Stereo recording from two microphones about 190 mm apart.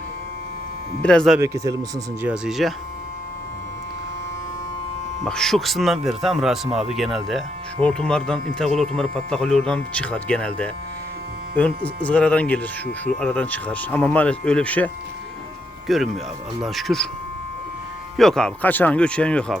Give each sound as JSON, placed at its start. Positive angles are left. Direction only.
{"t": 1.0, "sound": "speech", "side_deg": 5}
{"t": 1.4, "sound": "speech", "side_deg": -15}
{"t": 2.2, "sound": "speech", "side_deg": -5}
{"t": 5.2, "sound": "speech", "side_deg": 0}
{"t": 15.9, "sound": "speech", "side_deg": 0}
{"t": 18.2, "sound": "speech", "side_deg": 5}